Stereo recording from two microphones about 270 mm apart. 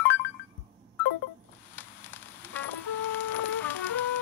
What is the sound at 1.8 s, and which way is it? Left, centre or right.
Fire, centre.